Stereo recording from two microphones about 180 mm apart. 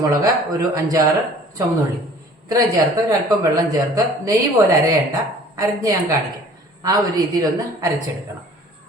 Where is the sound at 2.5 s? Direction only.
20° right (ahead or behind).